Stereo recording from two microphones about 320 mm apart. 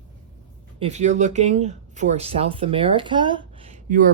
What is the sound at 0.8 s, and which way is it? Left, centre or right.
Speech, right.